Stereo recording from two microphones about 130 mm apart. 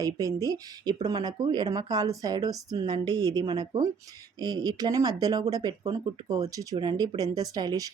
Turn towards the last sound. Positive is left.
turn(degrees=-30)  # may be behind; listen again after turning